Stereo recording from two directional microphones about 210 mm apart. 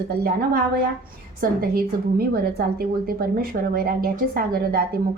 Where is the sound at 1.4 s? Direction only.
45° right (ahead or behind).